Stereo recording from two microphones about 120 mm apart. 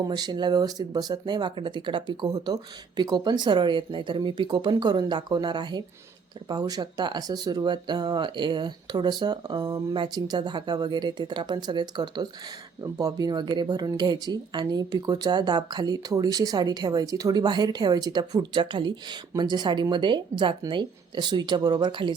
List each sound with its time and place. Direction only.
0.1 s speech: 35° right (ahead or behind)
9.6 s speech: 25° right (ahead or behind)
9.9 s speech: 40° right (ahead or behind)